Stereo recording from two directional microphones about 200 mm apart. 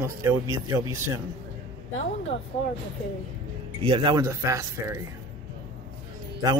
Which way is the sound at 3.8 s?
25° right (ahead or behind).